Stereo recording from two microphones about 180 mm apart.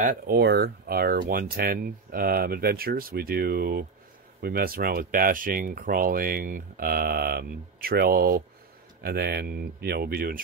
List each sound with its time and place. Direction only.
0.0 s speech: 50° right (ahead or behind)
0.4 s speech: 60° right (ahead or behind)